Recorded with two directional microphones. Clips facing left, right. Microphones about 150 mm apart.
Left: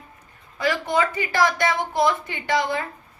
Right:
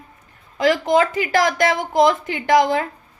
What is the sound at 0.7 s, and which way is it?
A woman's voice, 90° right.